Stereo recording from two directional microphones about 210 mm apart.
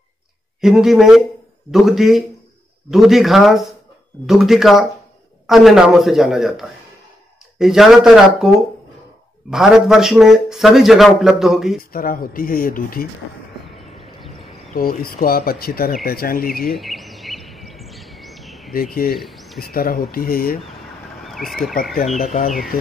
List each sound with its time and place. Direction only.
0.6 s a man's voice: centre (ahead or behind)
9.5 s a man's voice: centre (ahead or behind)
11.9 s speech: 45° left (ahead or behind)
14.7 s speech: 45° left (ahead or behind)
16.7 s a sound: centre (ahead or behind)
18.7 s speech: 45° left (ahead or behind)
19.1 s speech: centre (ahead or behind)
19.6 s speech: 45° left (ahead or behind)
21.2 s a sound: centre (ahead or behind)
22.2 s speech: 35° left (ahead or behind)